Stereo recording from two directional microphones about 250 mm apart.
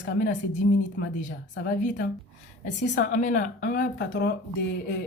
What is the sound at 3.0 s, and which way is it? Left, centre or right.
Speech, left.